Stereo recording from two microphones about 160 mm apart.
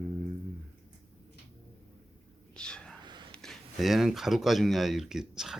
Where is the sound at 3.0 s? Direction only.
30° right (ahead or behind).